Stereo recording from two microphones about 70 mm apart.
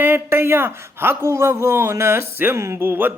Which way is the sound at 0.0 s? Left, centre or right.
Right.